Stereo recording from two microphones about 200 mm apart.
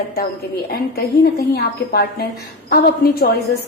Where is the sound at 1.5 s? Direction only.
50° left (ahead or behind).